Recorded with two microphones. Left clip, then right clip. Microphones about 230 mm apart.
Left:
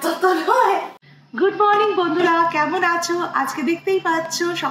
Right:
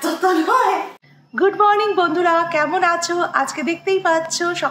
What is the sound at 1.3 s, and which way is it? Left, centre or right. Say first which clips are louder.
A woman's voice: right 2 dB; right.